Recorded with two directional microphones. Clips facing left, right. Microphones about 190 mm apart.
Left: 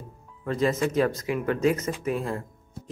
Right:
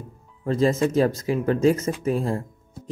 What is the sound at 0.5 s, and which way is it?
Speech, 30° right (ahead or behind).